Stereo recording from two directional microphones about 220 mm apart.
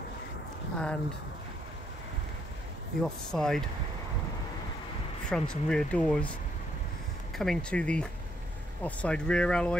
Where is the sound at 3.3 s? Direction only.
Centre (ahead or behind).